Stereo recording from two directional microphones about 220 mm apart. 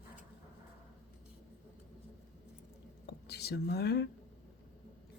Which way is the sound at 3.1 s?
50° left (ahead or behind).